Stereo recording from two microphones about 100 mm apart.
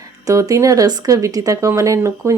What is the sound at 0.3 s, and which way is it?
Speech, 35° right (ahead or behind).